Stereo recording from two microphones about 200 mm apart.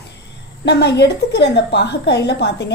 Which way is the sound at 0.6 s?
60° left (ahead or behind).